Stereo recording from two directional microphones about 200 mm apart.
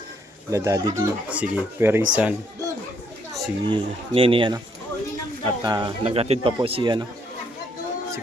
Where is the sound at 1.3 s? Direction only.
5° right (ahead or behind).